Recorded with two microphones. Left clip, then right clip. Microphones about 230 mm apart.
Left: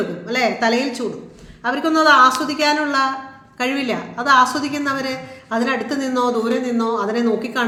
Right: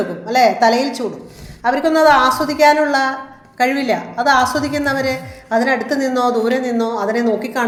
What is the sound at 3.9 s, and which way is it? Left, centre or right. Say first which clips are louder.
Speech: right 2 dB; centre.